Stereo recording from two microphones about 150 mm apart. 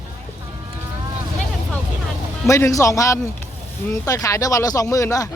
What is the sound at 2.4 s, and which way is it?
Speech, 20° left (ahead or behind).